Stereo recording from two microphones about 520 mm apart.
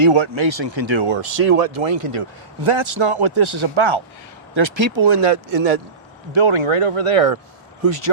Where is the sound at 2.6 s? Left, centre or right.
Right.